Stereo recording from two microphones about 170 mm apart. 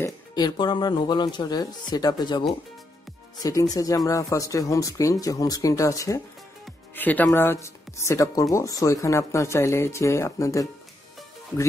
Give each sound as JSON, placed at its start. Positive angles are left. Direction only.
{"t": 0.0, "sound": "speech", "side_deg": 25}
{"t": 3.4, "sound": "speech", "side_deg": 20}